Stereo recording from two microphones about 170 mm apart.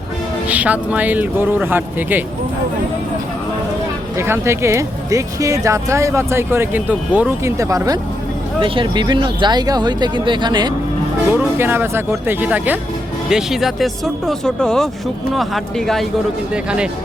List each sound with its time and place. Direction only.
0.4 s speech: 10° right (ahead or behind)
4.2 s speech: 15° right (ahead or behind)
8.6 s speech: 30° right (ahead or behind)
11.3 s speech: 10° right (ahead or behind)